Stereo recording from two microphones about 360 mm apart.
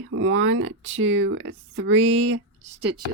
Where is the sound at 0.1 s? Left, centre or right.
Right.